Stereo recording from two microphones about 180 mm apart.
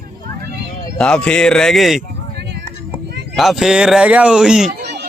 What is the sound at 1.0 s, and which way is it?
Speech, 5° left (ahead or behind).